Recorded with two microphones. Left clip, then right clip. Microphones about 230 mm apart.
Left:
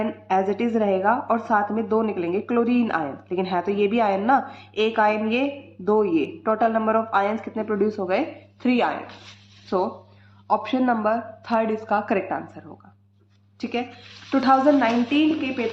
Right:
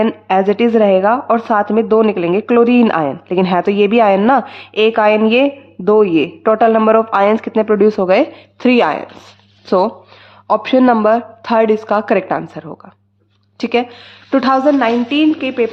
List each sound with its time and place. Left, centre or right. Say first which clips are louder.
0.0 s a woman's voice: right 9 dB; right